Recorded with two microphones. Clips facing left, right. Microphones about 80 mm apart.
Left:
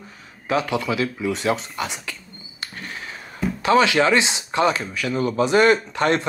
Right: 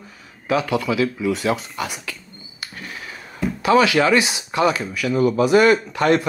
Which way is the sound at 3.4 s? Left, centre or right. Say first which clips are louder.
Right 1 dB; centre.